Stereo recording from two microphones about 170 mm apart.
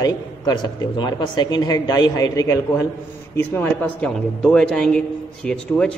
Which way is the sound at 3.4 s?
10° left (ahead or behind).